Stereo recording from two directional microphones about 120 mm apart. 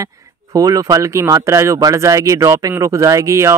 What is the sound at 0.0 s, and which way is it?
Speech, 30° right (ahead or behind).